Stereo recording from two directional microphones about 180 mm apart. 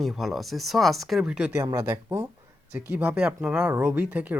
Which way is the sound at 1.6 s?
15° right (ahead or behind).